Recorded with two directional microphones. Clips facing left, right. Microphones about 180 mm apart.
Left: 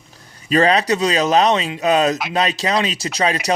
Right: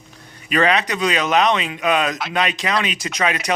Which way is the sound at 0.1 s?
35° left (ahead or behind).